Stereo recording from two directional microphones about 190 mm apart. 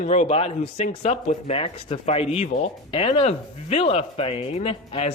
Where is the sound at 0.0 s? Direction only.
35° left (ahead or behind).